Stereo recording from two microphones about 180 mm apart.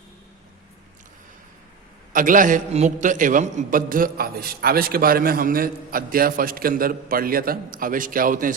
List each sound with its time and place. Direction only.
2.1 s a man's voice: 50° right (ahead or behind)